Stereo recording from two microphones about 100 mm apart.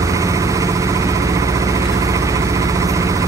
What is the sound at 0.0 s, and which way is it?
Vehicle, 35° right (ahead or behind).